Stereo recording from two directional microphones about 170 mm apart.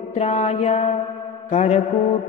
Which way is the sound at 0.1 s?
40° left (ahead or behind).